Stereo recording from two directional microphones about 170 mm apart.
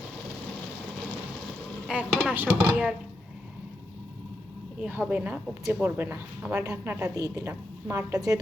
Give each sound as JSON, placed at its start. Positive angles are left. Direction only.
{"t": 1.9, "sound": "a woman's voice", "side_deg": -5}
{"t": 4.8, "sound": "a woman's voice", "side_deg": -10}